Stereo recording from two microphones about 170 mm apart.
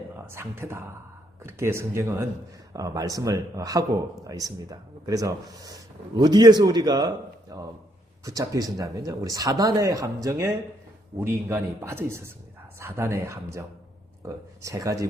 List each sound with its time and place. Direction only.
0.3 s a man's voice: 15° right (ahead or behind)